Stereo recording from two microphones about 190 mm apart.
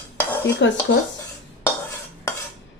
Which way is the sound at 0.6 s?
70° left (ahead or behind).